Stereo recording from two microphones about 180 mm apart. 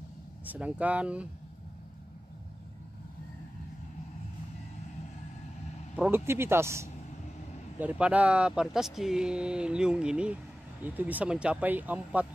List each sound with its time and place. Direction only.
0.5 s speech: 5° right (ahead or behind)
5.9 s speech: 10° right (ahead or behind)